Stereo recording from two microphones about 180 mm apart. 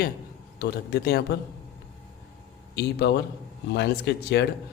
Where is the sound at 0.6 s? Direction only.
65° left (ahead or behind).